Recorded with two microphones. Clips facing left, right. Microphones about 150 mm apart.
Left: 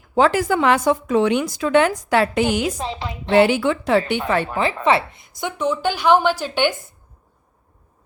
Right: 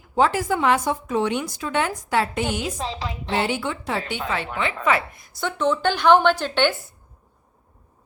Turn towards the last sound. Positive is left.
turn(degrees=10)  # may be behind; listen again after turning